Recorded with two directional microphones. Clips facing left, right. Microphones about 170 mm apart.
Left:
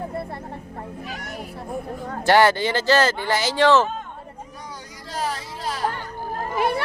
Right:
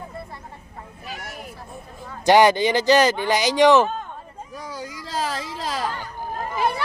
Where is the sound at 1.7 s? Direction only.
65° left (ahead or behind).